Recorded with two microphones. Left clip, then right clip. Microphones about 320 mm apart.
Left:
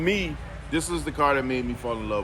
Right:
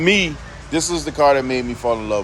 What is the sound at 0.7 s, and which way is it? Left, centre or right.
Speech, centre.